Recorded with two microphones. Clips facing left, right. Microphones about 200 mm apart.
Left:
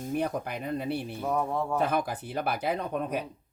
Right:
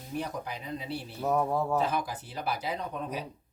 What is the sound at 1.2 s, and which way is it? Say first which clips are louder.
Speech: right 4 dB; 5° right (ahead or behind).